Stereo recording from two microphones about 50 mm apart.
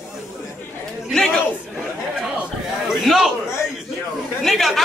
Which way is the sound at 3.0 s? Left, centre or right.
Centre.